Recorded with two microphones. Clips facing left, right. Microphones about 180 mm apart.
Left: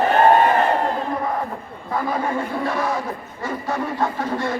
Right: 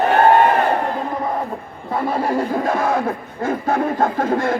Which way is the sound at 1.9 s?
30° right (ahead or behind).